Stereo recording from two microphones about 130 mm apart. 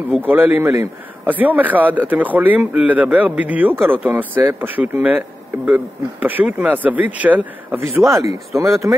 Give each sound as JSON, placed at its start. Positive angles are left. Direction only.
{"t": 0.3, "sound": "speech", "side_deg": -15}
{"t": 6.2, "sound": "speech", "side_deg": -10}